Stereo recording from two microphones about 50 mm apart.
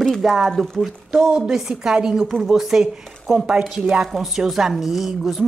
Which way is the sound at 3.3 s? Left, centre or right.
Right.